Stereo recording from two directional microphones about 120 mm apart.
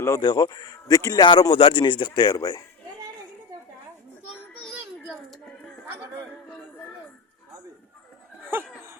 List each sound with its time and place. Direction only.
0.2 s a man's voice: 35° left (ahead or behind)
8.4 s laughter: 20° right (ahead or behind)